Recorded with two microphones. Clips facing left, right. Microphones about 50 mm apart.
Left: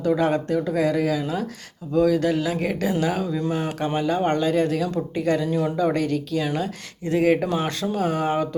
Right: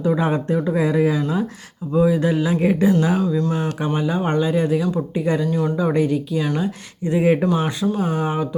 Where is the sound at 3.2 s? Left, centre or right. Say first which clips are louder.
Right 4 dB; centre.